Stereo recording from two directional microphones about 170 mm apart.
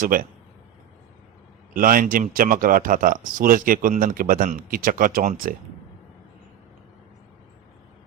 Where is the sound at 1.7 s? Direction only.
55° right (ahead or behind).